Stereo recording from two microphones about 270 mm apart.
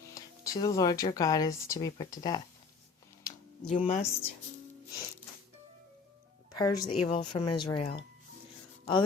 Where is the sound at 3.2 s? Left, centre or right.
Centre.